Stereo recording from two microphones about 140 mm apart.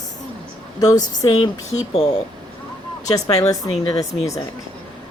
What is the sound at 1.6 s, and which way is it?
Speech, 50° left (ahead or behind).